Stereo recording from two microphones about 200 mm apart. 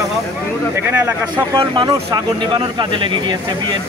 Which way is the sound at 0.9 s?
15° right (ahead or behind).